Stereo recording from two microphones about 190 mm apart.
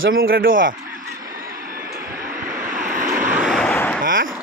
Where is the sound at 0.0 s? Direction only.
90° right.